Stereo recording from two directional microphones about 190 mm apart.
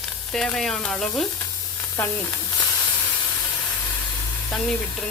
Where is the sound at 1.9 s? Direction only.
15° left (ahead or behind).